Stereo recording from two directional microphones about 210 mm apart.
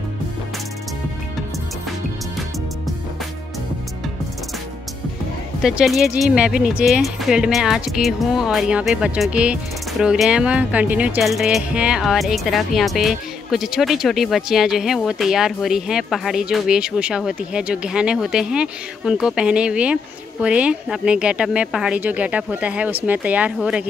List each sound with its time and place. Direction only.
5.6 s speech: centre (ahead or behind)